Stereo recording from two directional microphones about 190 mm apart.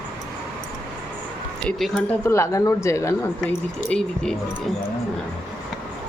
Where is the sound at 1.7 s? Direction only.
5° left (ahead or behind).